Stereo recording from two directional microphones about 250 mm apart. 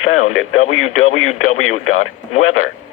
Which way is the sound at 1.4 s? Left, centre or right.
Left.